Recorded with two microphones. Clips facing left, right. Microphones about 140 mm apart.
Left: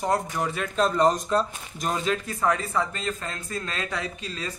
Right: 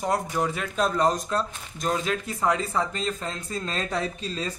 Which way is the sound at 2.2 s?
20° right (ahead or behind).